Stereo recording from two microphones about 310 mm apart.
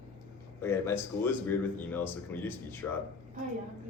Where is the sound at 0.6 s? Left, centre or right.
Centre.